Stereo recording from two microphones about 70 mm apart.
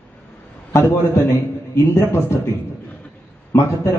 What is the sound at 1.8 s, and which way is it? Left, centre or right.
Speech, left.